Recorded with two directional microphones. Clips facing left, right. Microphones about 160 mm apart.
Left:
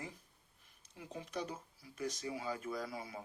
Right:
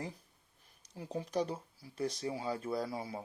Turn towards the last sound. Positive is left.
turn(degrees=-30)  # may be behind; listen again after turning